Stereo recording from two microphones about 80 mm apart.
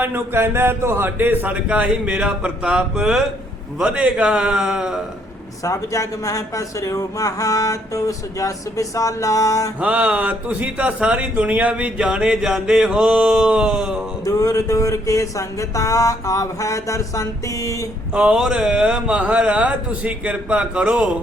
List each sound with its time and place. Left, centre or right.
0.0 s a man's voice: right; by 4.9 s centre
5.6 s a man's voice: left
9.8 s a man's voice: centre
14.3 s a man's voice: left
18.1 s a man's voice: centre